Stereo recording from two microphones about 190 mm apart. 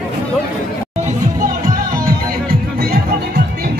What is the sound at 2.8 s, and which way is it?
Music, 55° right (ahead or behind).